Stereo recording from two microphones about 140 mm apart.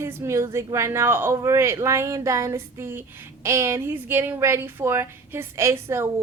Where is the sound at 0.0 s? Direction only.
20° right (ahead or behind).